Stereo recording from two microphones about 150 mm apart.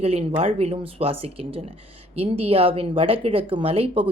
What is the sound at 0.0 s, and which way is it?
Speech, 45° right (ahead or behind).